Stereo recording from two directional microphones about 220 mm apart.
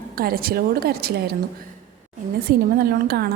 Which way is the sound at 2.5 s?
45° right (ahead or behind).